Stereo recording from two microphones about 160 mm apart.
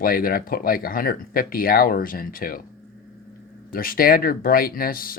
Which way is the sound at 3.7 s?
65° left (ahead or behind).